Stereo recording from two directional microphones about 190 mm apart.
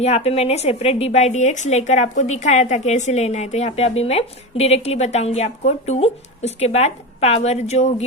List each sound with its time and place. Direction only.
0.0 s speech: 35° left (ahead or behind)